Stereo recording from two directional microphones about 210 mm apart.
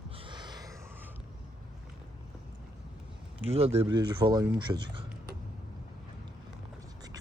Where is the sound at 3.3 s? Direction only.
30° right (ahead or behind).